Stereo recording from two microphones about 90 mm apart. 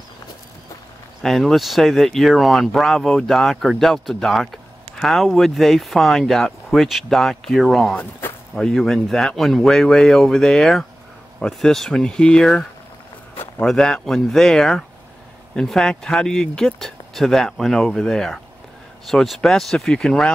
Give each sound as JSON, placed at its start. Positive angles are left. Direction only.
{"t": 1.2, "sound": "speech", "side_deg": 0}
{"t": 7.9, "sound": "speech", "side_deg": 20}
{"t": 8.5, "sound": "speech", "side_deg": 5}